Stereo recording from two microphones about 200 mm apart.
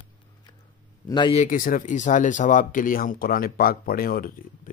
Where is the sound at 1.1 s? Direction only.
25° left (ahead or behind).